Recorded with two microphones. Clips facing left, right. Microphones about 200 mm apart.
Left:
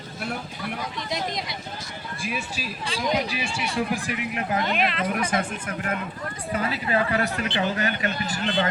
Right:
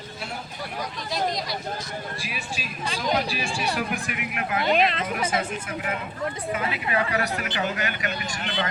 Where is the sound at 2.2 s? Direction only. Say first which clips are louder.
Left 3 dB; 45° left (ahead or behind).